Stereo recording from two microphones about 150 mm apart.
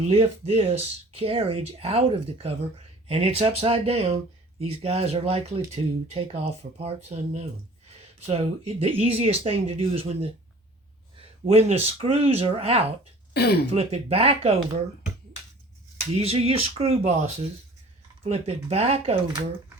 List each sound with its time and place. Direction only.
0.0 s speech: 45° right (ahead or behind)
13.3 s speech: 90° left
13.7 s speech: 40° right (ahead or behind)
16.1 s speech: 40° right (ahead or behind)